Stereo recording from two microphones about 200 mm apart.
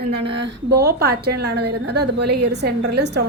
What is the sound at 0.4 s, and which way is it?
A woman's voice, 55° right (ahead or behind).